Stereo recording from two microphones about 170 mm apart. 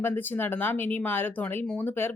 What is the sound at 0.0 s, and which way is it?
Speech, 10° left (ahead or behind).